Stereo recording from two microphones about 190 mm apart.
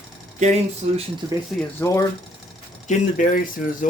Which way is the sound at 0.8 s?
35° right (ahead or behind).